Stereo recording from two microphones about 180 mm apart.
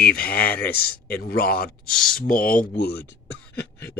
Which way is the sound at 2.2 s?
50° left (ahead or behind).